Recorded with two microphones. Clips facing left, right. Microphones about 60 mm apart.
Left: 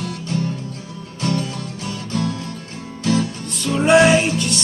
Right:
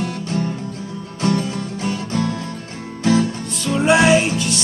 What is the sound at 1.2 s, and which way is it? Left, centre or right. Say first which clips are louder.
Music: right 3 dB; right.